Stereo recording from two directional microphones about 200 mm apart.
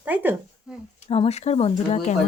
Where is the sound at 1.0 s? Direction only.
30° left (ahead or behind).